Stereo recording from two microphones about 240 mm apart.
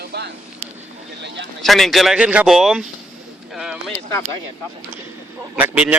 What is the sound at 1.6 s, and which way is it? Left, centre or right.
Speech, centre.